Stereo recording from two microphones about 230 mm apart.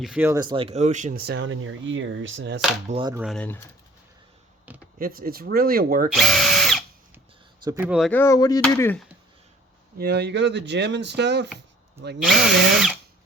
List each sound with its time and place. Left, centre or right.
0.0 s speech: centre; by 2.6 s right
2.9 s speech: centre
3.2 s drill: centre
4.9 s speech: right
6.1 s drill: centre
7.6 s speech: centre
7.9 s drill: centre
8.2 s speech: centre
10.0 s speech: right
12.2 s drill: centre